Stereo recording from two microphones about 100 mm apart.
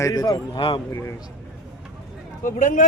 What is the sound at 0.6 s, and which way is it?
Speech, 65° left (ahead or behind).